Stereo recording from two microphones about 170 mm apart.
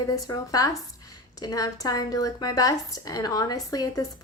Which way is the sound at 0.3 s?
20° left (ahead or behind).